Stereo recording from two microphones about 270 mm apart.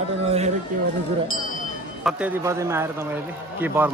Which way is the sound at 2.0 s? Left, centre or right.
Centre.